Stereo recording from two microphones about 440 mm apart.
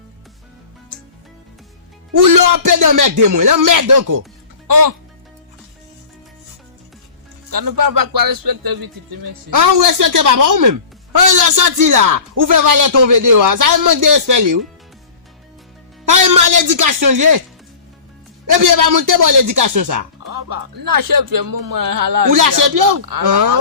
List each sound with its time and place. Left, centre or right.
2.2 s speech: right
7.5 s speech: right
16.0 s music: right
18.6 s speech: right